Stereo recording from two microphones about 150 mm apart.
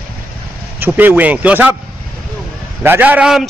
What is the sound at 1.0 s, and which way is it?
Speech, 10° right (ahead or behind).